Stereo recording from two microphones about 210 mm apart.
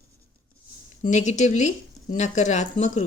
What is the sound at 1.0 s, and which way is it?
Speech, 35° left (ahead or behind).